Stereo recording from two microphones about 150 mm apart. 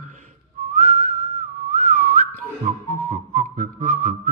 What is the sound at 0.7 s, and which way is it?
Whistling, 60° right (ahead or behind).